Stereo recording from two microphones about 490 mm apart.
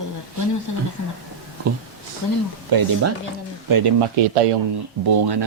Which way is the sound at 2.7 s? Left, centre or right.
Right.